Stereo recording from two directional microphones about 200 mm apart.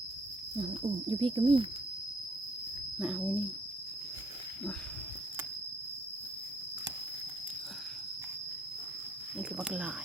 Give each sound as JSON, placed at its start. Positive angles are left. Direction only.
{"t": 0.5, "sound": "speech", "side_deg": -30}
{"t": 3.0, "sound": "speech", "side_deg": -5}
{"t": 9.4, "sound": "speech", "side_deg": -5}